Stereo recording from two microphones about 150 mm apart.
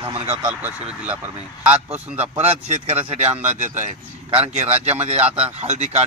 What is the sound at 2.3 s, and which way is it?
Speech, 45° right (ahead or behind).